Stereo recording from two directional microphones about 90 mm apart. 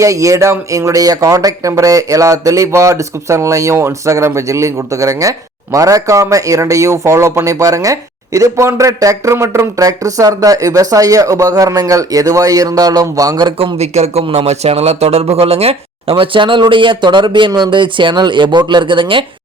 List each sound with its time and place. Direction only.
0.0 s speech: 35° right (ahead or behind)
15.4 s speech: 90° right; by 19.2 s 70° right (ahead or behind)